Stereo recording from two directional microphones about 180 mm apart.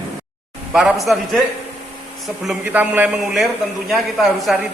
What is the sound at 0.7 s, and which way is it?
Speech, centre (ahead or behind).